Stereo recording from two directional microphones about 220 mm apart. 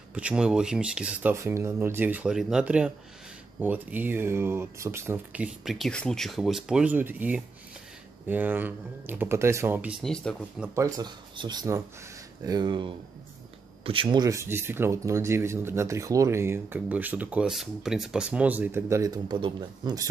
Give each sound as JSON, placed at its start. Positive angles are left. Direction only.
{"t": 0.1, "sound": "speech", "side_deg": -5}
{"t": 10.7, "sound": "speech", "side_deg": -15}